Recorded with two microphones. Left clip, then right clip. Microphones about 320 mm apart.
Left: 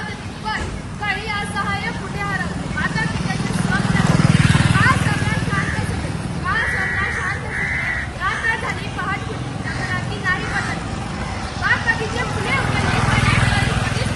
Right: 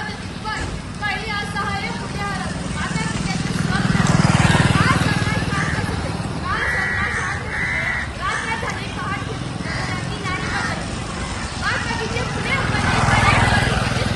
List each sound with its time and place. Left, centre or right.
3.4 s vehicle: centre
4.2 s wild animals: centre
12.2 s vehicle: centre
13.0 s vehicle: centre